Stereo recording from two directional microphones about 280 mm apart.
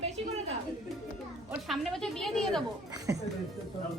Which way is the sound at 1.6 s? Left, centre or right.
Centre.